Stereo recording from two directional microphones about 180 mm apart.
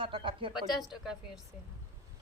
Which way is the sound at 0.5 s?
Centre (ahead or behind).